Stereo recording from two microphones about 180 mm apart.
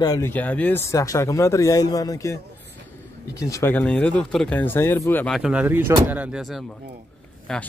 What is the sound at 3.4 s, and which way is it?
Speech, 15° left (ahead or behind).